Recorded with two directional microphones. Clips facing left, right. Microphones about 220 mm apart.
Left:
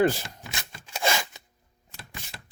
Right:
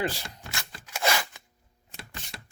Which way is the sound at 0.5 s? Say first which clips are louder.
Even; 20° left (ahead or behind).